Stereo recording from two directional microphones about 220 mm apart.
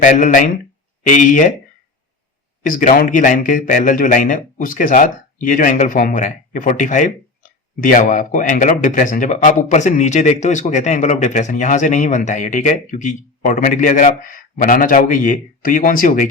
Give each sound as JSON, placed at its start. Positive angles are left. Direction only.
{"t": 0.0, "sound": "a man's voice", "side_deg": 35}
{"t": 2.6, "sound": "a man's voice", "side_deg": 40}